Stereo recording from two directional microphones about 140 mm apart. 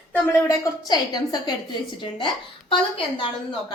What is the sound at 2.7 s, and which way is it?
Speech, 40° left (ahead or behind).